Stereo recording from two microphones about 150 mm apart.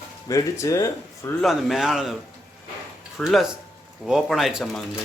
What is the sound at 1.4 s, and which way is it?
Speech, centre (ahead or behind).